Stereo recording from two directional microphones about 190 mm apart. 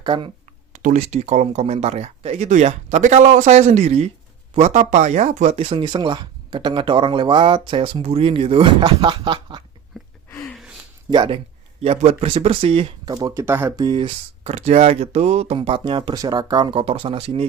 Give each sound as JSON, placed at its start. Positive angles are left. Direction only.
{"t": 0.0, "sound": "speech", "side_deg": -25}
{"t": 0.7, "sound": "speech", "side_deg": -40}
{"t": 9.9, "sound": "a sound", "side_deg": 0}
{"t": 11.1, "sound": "speech", "side_deg": -25}